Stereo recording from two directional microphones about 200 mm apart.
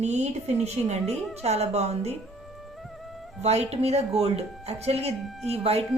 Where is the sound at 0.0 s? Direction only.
35° right (ahead or behind).